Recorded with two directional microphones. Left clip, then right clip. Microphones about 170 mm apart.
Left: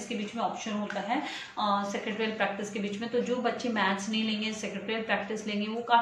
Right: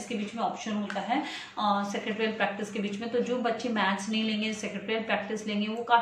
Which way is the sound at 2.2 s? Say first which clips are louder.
Right 1 dB; centre (ahead or behind).